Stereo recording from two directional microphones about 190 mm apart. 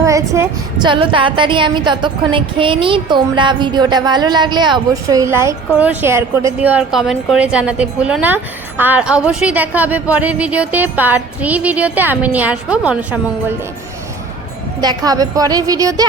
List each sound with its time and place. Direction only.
0.0 s a woman's voice: 15° right (ahead or behind)
14.8 s a woman's voice: 20° right (ahead or behind)